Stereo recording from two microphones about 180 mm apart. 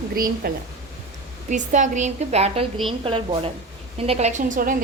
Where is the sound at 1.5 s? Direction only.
45° right (ahead or behind).